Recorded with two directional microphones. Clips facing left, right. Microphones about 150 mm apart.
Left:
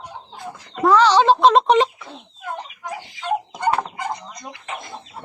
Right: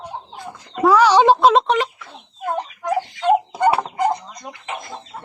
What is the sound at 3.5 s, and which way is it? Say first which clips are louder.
Fowl: right 4 dB; 10° right (ahead or behind).